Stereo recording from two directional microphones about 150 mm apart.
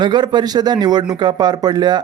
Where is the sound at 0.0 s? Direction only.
30° right (ahead or behind).